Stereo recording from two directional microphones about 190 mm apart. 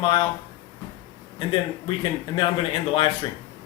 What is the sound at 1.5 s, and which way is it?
Speech, 25° left (ahead or behind).